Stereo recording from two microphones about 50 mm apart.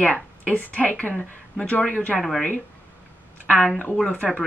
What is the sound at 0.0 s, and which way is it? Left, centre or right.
A woman's voice, left.